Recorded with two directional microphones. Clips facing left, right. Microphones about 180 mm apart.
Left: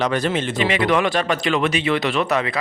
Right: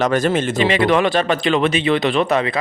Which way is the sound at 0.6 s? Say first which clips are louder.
Right 3 dB; 30° right (ahead or behind).